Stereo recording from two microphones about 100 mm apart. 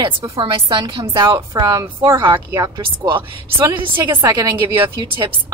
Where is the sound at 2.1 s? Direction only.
50° right (ahead or behind).